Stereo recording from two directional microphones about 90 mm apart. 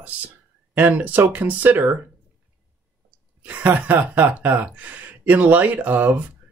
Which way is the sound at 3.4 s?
20° right (ahead or behind).